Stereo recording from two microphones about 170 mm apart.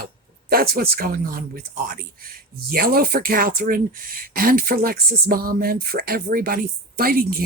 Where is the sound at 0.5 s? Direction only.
60° right (ahead or behind).